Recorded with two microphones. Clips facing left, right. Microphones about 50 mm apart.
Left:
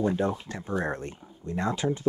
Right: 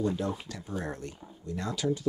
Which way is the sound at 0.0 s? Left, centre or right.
Left.